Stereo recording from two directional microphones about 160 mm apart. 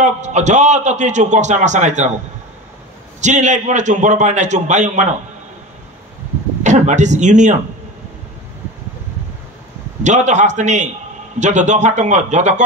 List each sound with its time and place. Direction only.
0.0 s a man's voice: 50° right (ahead or behind)
3.2 s a man's voice: 50° right (ahead or behind)
6.6 s a man's voice: 50° right (ahead or behind)
10.0 s a man's voice: 50° right (ahead or behind)